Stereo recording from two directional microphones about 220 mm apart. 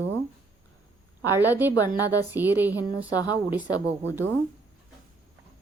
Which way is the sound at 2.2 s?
10° right (ahead or behind).